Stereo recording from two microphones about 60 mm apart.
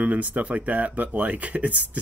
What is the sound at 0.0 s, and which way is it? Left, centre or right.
Speech, right.